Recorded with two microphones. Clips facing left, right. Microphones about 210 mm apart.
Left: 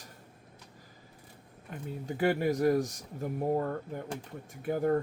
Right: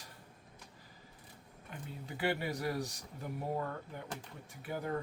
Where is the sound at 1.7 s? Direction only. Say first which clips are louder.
Left 8 dB; 45° left (ahead or behind).